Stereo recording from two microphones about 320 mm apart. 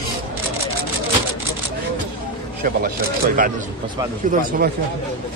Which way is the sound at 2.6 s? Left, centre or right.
Right.